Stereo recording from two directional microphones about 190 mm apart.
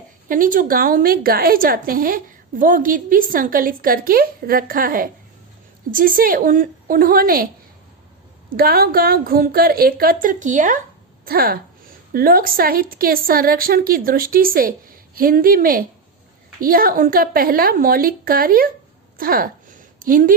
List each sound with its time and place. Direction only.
0.3 s a woman's voice: 45° right (ahead or behind)
8.4 s a woman's voice: 50° right (ahead or behind)
11.3 s a woman's voice: 50° right (ahead or behind)
19.1 s a sound: 50° right (ahead or behind)